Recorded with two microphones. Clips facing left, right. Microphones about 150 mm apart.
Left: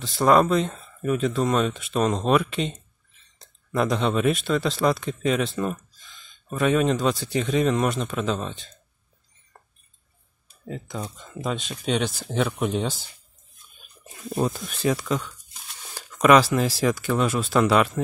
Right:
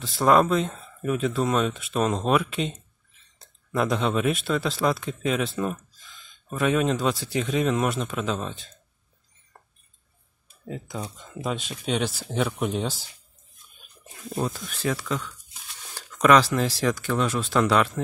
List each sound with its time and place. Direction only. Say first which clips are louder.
0.0 s speech: left 1 dB; centre (ahead or behind)
10.6 s speech: left 1 dB; 5° right (ahead or behind)
14.3 s speech: left 3 dB; 20° left (ahead or behind)